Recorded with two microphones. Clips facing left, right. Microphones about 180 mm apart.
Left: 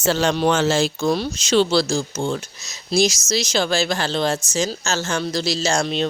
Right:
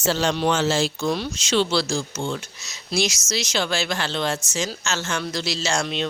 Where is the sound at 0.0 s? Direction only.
50° left (ahead or behind).